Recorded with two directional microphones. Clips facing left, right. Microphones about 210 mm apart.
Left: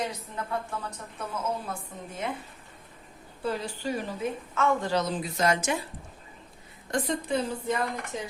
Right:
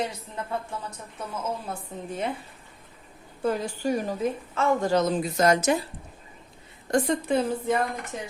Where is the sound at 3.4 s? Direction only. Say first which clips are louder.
Right 5 dB; 45° right (ahead or behind).